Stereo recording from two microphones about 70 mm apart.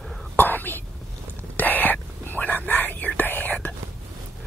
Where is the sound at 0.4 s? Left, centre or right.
Left.